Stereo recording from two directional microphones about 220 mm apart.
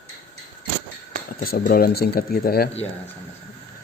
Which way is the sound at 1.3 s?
45° left (ahead or behind).